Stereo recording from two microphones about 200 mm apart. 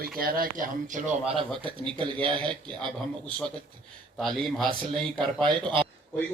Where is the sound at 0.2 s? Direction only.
45° right (ahead or behind).